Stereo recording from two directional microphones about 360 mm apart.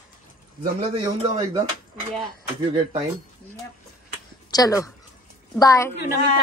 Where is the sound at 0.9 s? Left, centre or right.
Centre.